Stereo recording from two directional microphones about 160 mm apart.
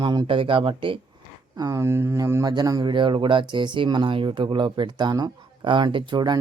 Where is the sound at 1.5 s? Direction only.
20° right (ahead or behind).